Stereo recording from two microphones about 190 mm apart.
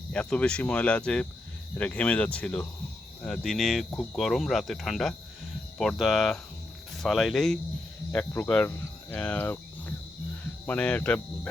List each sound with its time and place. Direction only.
0.1 s speech: 5° left (ahead or behind)